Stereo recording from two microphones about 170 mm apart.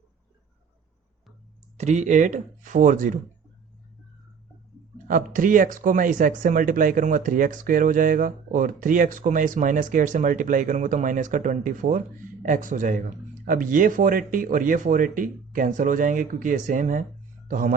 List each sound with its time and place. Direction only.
1.8 s speech: 45° right (ahead or behind)
5.0 s speech: 50° right (ahead or behind)